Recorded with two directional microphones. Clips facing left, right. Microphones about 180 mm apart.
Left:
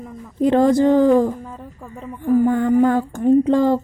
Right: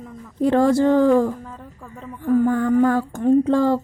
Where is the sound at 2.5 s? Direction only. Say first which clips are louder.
Left 2 dB; 25° left (ahead or behind).